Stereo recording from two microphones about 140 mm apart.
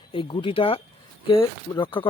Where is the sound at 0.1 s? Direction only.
40° left (ahead or behind).